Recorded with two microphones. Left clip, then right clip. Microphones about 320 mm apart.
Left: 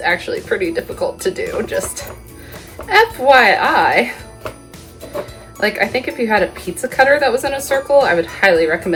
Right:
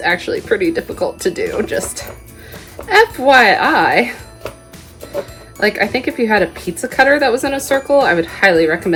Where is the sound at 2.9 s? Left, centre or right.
Right.